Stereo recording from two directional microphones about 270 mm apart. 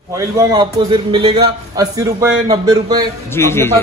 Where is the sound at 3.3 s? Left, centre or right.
Centre.